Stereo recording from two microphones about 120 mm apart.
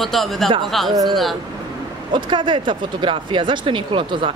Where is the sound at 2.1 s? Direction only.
40° right (ahead or behind).